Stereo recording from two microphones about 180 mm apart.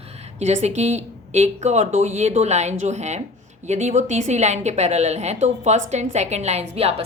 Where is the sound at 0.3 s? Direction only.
40° right (ahead or behind).